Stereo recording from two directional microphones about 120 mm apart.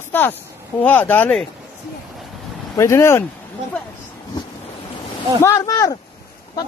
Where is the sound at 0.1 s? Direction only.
15° left (ahead or behind).